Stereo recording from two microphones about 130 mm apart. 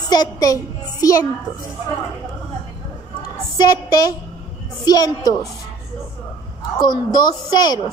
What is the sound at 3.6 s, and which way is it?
Speech, 30° left (ahead or behind).